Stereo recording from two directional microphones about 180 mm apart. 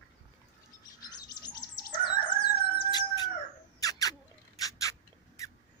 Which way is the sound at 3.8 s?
20° left (ahead or behind).